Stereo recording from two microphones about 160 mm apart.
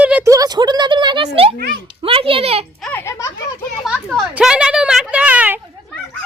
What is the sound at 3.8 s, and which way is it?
Speech, centre (ahead or behind).